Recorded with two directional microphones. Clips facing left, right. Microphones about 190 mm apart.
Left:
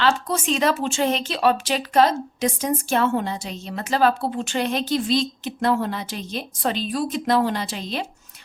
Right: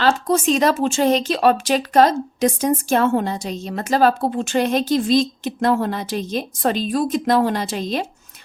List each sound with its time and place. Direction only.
0.0 s speech: 45° right (ahead or behind)